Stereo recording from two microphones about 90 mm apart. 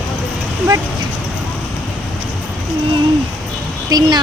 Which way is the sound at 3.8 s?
50° right (ahead or behind).